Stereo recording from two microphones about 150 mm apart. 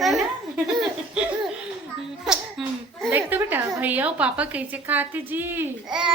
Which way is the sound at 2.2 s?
Centre (ahead or behind).